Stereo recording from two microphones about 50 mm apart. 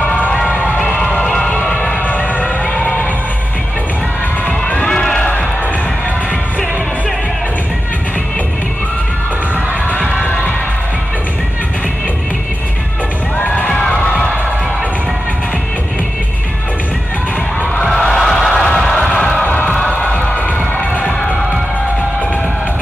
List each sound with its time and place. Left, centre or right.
0.0 s a sound: left
0.5 s crowd: left
1.2 s music: centre
2.0 s a sound: left
4.5 s children shouting: left
4.8 s run: centre
13.7 s crowd: centre
17.8 s a sound: centre
18.5 s music: left